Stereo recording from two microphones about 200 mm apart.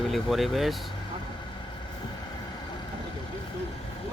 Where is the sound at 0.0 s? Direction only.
Centre (ahead or behind).